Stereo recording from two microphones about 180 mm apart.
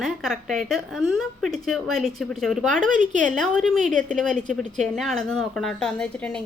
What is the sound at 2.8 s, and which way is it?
Speech, 45° right (ahead or behind).